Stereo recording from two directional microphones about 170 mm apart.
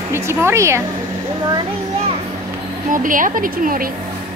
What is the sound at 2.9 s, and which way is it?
Speech, 50° right (ahead or behind).